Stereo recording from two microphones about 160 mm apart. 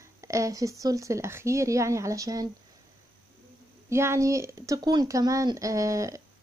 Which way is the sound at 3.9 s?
15° right (ahead or behind).